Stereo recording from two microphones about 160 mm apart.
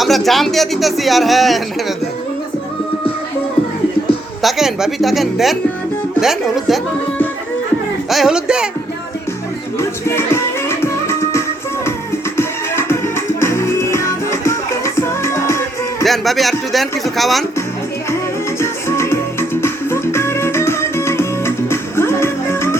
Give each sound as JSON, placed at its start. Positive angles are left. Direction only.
{"t": 0.0, "sound": "a man's voice", "side_deg": 0}
{"t": 4.4, "sound": "a man's voice", "side_deg": 0}
{"t": 8.1, "sound": "a man's voice", "side_deg": -5}
{"t": 9.7, "sound": "music", "side_deg": 15}
{"t": 16.0, "sound": "a man's voice", "side_deg": 0}
{"t": 18.6, "sound": "music", "side_deg": 15}